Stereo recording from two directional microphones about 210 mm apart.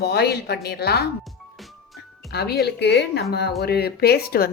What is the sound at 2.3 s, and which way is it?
A woman's voice, 50° left (ahead or behind).